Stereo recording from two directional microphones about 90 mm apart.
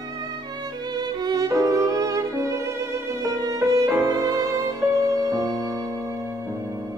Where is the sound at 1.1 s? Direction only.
50° right (ahead or behind); by 2.7 s 35° right (ahead or behind).